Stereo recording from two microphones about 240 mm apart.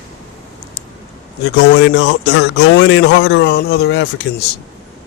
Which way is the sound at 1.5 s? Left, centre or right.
Left.